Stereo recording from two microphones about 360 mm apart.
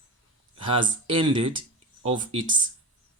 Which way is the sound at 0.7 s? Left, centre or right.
Centre.